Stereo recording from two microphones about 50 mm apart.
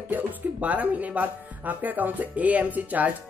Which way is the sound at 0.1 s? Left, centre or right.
Right.